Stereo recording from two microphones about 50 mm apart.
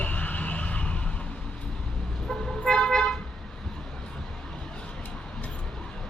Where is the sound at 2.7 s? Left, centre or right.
Centre.